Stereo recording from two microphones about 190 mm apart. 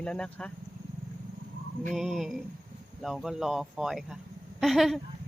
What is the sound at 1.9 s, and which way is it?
Speech, centre (ahead or behind).